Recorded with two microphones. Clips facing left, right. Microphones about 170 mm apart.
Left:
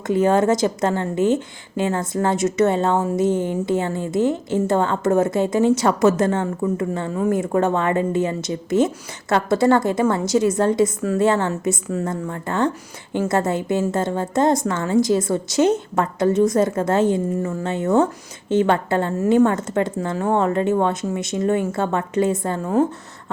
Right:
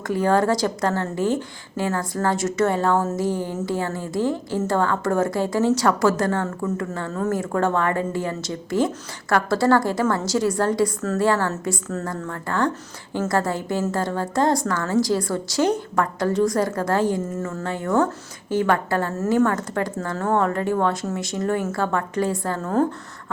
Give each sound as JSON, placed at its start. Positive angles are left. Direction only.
{"t": 0.1, "sound": "a woman's voice", "side_deg": 20}